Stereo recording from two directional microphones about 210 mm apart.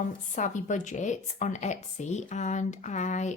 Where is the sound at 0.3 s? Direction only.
35° left (ahead or behind).